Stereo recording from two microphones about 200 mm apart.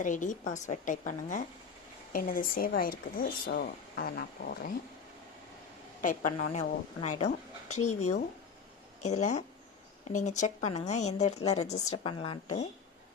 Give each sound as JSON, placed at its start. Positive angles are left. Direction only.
{"t": 0.0, "sound": "speech", "side_deg": 40}
{"t": 6.0, "sound": "speech", "side_deg": 40}